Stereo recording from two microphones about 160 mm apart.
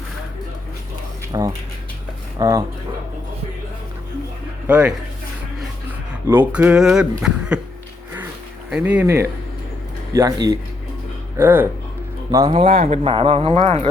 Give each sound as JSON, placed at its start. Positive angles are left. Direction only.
{"t": 1.3, "sound": "speech", "side_deg": -20}
{"t": 4.6, "sound": "speech", "side_deg": -10}
{"t": 6.2, "sound": "speech", "side_deg": -10}
{"t": 8.7, "sound": "speech", "side_deg": -10}
{"t": 11.3, "sound": "speech", "side_deg": -10}
{"t": 12.5, "sound": "speech", "side_deg": -35}